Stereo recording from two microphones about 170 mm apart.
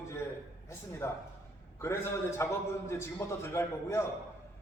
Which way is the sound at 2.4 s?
15° left (ahead or behind).